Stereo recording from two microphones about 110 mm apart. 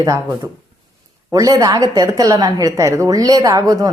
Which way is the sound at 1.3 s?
35° right (ahead or behind).